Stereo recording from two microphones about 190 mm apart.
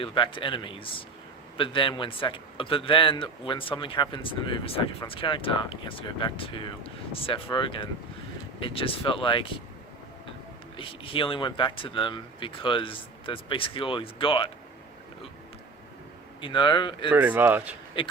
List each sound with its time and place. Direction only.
0.0 s a man's voice: 25° left (ahead or behind)
10.8 s a man's voice: 25° left (ahead or behind)
16.4 s a man's voice: 25° left (ahead or behind)
17.1 s speech: 10° right (ahead or behind)
18.0 s a man's voice: 25° left (ahead or behind)